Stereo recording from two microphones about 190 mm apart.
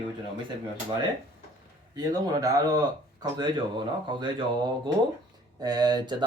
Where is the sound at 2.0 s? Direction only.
20° right (ahead or behind).